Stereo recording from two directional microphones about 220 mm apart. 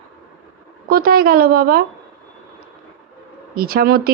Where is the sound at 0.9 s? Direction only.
40° right (ahead or behind).